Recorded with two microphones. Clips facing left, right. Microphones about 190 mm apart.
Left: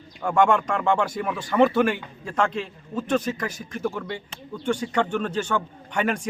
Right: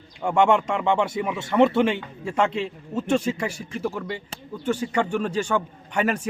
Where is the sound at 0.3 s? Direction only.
25° right (ahead or behind).